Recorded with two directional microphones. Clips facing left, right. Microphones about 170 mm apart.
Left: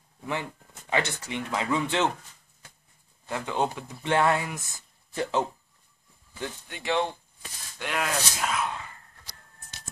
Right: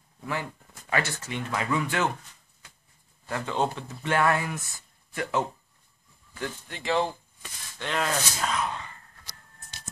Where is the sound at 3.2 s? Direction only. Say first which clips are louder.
Even; 15° left (ahead or behind).